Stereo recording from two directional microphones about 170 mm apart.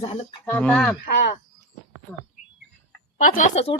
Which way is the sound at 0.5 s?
10° left (ahead or behind).